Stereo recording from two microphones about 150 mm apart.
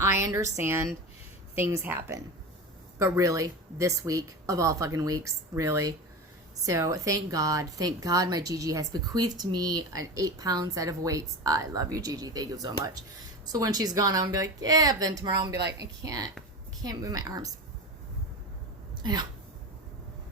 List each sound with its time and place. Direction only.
0.0 s a woman's voice: 20° right (ahead or behind)